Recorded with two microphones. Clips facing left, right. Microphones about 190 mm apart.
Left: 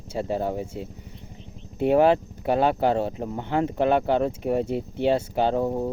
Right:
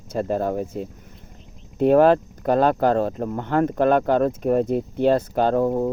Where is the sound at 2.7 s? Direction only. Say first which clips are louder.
Right 3 dB; 60° right (ahead or behind).